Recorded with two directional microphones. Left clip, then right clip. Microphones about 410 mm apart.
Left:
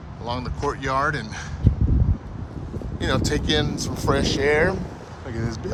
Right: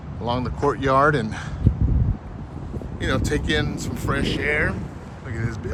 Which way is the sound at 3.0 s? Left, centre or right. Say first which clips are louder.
Even; centre.